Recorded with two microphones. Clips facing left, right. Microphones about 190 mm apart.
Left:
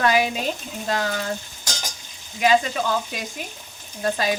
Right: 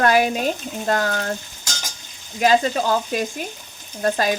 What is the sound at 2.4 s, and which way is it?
Speech, 40° right (ahead or behind).